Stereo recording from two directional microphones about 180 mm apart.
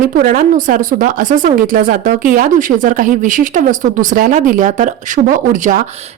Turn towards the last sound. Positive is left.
turn(degrees=-45)  # may be behind; listen again after turning